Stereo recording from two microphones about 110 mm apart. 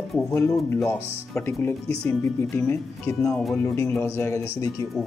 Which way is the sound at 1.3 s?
20° left (ahead or behind).